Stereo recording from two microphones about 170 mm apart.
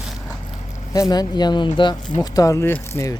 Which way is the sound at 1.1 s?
25° left (ahead or behind).